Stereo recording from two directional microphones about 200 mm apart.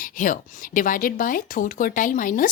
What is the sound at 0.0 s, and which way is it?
Speech, 40° left (ahead or behind).